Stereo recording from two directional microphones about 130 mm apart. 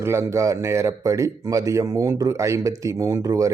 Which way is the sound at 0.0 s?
20° right (ahead or behind).